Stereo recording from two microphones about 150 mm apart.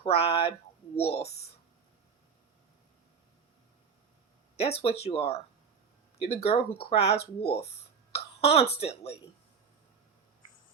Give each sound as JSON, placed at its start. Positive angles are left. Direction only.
{"t": 0.0, "sound": "speech", "side_deg": 40}
{"t": 4.5, "sound": "speech", "side_deg": 40}
{"t": 8.1, "sound": "throat clearing", "side_deg": 45}
{"t": 8.8, "sound": "speech", "side_deg": 45}